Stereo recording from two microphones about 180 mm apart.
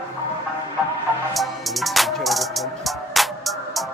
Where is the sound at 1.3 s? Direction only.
Centre (ahead or behind).